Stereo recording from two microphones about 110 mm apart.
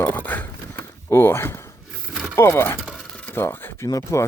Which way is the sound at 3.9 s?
35° left (ahead or behind).